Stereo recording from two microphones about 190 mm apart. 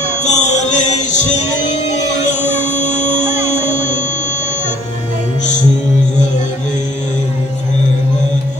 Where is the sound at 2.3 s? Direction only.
40° left (ahead or behind).